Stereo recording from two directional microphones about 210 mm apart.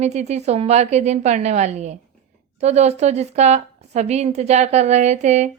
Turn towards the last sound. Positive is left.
turn(degrees=-30)  # may be behind; listen again after turning